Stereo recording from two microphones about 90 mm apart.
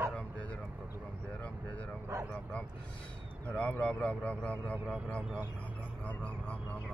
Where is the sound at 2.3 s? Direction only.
15° left (ahead or behind).